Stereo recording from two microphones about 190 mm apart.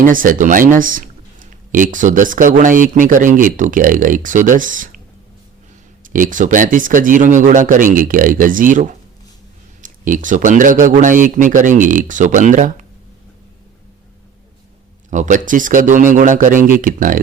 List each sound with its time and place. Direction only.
0.0 s speech: 45° right (ahead or behind)
6.0 s speech: 45° right (ahead or behind)
15.1 s speech: 40° right (ahead or behind)